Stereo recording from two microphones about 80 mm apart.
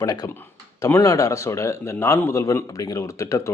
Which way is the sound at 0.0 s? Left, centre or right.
Left.